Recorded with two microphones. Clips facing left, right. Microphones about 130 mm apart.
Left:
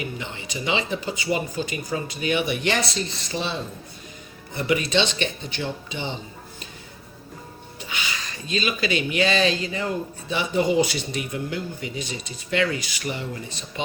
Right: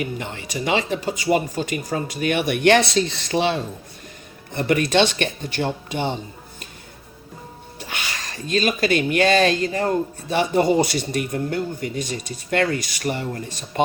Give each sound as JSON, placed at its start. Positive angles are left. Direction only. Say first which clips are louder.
{"t": 0.0, "sound": "speech", "louder": "right 4 dB", "side_deg": -50}
{"t": 4.5, "sound": "speech", "louder": "right 4 dB", "side_deg": -50}
{"t": 7.9, "sound": "speech", "louder": "right 1 dB", "side_deg": -55}